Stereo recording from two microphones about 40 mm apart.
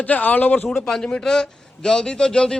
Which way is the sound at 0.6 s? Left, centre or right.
Centre.